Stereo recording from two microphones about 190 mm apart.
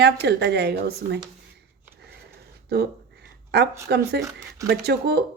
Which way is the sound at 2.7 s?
60° right (ahead or behind).